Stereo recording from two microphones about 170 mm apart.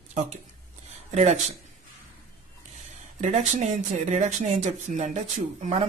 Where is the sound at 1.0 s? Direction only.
40° right (ahead or behind).